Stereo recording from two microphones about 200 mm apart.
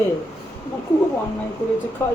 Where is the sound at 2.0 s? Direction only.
10° left (ahead or behind).